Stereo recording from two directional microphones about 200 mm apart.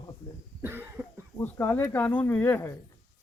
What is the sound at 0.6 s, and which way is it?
Cough, 10° right (ahead or behind).